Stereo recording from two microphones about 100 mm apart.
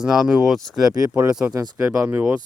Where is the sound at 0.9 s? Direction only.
35° right (ahead or behind).